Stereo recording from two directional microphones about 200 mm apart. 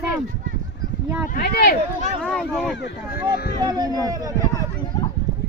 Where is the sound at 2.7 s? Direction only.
60° left (ahead or behind).